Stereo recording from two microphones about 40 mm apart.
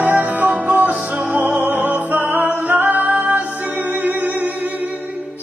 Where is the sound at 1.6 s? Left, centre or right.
Right.